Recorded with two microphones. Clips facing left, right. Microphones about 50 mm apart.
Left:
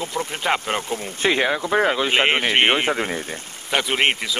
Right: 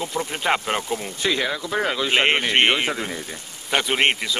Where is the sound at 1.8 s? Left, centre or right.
Centre.